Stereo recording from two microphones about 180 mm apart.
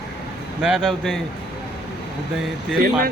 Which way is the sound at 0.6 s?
Centre (ahead or behind).